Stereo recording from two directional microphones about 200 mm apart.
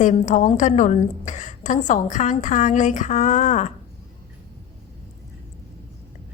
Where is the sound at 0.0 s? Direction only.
40° left (ahead or behind).